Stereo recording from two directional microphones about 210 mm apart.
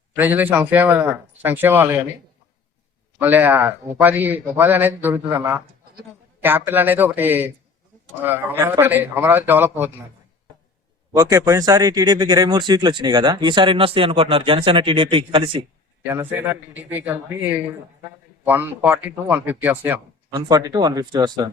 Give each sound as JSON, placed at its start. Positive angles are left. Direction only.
{"t": 0.2, "sound": "a man's voice", "side_deg": -10}
{"t": 3.2, "sound": "a man's voice", "side_deg": -10}
{"t": 11.1, "sound": "speech", "side_deg": -15}
{"t": 16.5, "sound": "a man's voice", "side_deg": -10}